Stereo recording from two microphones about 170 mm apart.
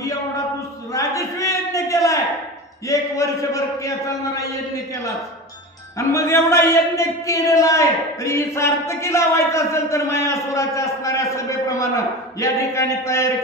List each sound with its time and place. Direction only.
0.9 s a sound: 20° left (ahead or behind)
2.9 s a man's voice: 20° left (ahead or behind)
5.9 s a man's voice: 15° left (ahead or behind)